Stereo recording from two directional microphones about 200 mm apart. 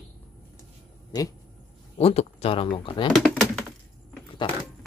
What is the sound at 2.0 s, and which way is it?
Speech, 30° left (ahead or behind).